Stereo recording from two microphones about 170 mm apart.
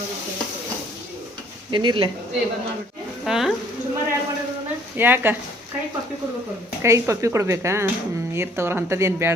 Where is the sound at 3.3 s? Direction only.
Centre (ahead or behind).